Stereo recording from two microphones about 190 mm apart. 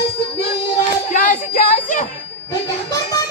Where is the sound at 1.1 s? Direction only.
45° left (ahead or behind).